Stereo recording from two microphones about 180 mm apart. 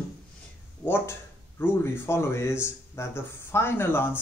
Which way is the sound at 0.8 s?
10° left (ahead or behind).